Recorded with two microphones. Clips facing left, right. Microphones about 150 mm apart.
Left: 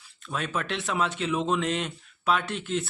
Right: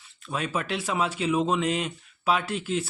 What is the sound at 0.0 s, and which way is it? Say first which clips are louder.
Speech: right 2 dB; 5° right (ahead or behind).